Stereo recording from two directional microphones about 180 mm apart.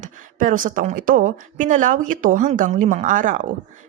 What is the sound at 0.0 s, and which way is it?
A woman's voice, 45° right (ahead or behind).